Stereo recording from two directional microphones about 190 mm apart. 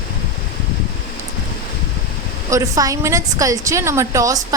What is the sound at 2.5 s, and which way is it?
A woman's voice, 15° right (ahead or behind).